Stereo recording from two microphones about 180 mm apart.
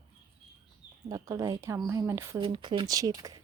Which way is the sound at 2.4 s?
25° right (ahead or behind).